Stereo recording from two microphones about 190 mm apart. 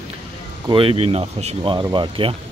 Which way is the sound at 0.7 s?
30° right (ahead or behind).